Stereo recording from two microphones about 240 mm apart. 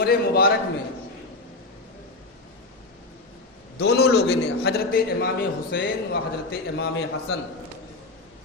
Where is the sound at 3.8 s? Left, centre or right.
Left.